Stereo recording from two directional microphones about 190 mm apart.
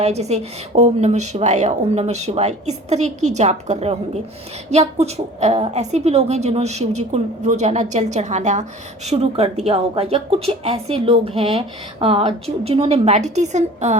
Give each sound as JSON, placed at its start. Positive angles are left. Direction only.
{"t": 0.0, "sound": "a woman's voice", "side_deg": -35}